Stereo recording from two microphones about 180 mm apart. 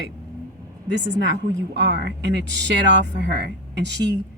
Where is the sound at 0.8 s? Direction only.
70° right (ahead or behind).